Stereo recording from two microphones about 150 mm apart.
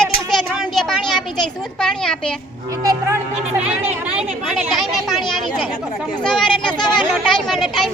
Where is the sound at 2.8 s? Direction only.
25° right (ahead or behind).